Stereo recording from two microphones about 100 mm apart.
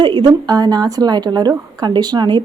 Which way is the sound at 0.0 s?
50° right (ahead or behind).